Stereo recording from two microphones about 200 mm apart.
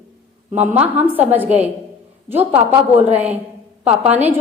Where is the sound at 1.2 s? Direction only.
10° right (ahead or behind).